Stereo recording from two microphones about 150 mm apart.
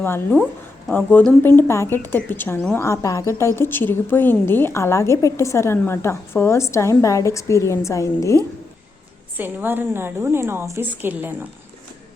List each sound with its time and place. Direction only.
0.0 s a woman's voice: 10° left (ahead or behind)
9.4 s a woman's voice: 15° right (ahead or behind)